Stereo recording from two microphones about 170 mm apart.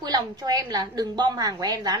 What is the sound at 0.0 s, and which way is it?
A woman's voice, 25° right (ahead or behind).